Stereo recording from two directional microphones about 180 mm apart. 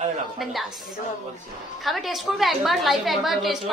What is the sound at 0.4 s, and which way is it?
Speech, centre (ahead or behind).